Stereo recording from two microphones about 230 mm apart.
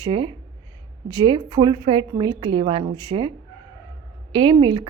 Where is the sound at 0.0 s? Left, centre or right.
Right.